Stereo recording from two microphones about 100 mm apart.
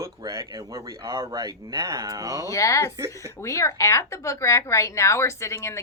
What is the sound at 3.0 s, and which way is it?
Speech, 30° right (ahead or behind).